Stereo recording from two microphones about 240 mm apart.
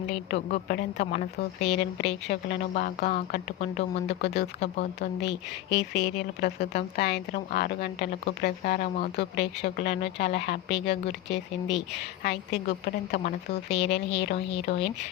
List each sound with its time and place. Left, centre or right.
0.5 s speech: left
1.6 s speech: left
4.2 s a woman's voice: left
12.2 s speech: left
13.8 s a woman's voice: left